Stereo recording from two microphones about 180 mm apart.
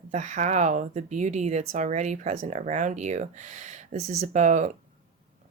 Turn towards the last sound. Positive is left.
turn(degrees=-40)  # may be behind; listen again after turning